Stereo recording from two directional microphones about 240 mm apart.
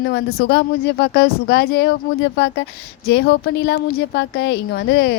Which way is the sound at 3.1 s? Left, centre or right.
Left.